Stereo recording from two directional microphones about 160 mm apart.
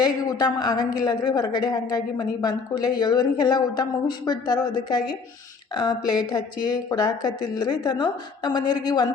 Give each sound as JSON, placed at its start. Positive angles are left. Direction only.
{"t": 0.0, "sound": "a woman's voice", "side_deg": 25}